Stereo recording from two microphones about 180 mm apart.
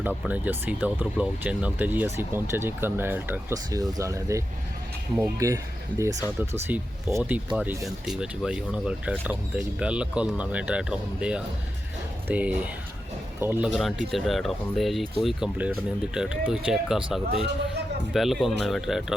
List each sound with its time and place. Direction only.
0.0 s speech: 10° right (ahead or behind)
13.7 s speech: centre (ahead or behind)